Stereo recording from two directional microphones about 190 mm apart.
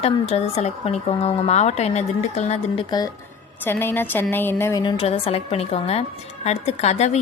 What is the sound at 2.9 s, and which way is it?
Speech, 20° left (ahead or behind).